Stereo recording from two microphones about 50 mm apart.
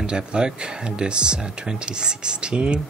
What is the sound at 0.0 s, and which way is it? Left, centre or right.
Speech, centre.